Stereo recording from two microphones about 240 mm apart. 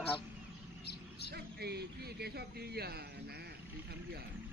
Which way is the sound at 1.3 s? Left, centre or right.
Right.